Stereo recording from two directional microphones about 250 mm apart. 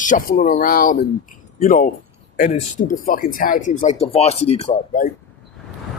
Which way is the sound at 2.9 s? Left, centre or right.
Left.